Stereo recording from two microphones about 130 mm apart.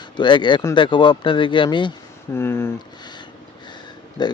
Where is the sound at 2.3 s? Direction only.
20° left (ahead or behind).